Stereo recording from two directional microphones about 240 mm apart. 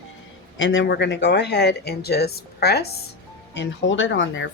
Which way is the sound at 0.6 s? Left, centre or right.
Left.